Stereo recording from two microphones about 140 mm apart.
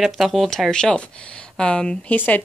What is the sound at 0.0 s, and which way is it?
Speech, centre (ahead or behind).